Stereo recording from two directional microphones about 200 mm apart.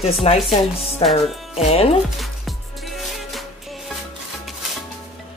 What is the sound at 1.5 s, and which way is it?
Speech, 30° left (ahead or behind).